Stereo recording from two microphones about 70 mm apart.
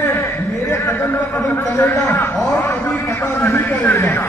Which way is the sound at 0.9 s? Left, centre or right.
Left.